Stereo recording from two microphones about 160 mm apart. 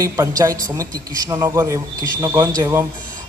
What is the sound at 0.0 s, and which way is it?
A man's voice, 20° right (ahead or behind).